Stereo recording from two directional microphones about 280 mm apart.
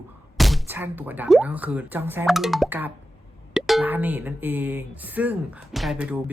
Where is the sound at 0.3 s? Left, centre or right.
Centre.